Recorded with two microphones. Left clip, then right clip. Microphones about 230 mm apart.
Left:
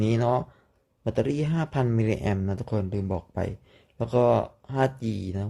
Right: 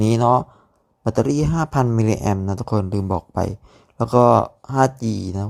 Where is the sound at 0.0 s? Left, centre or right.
Right.